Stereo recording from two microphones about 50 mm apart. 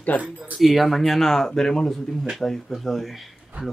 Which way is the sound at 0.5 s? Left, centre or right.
Centre.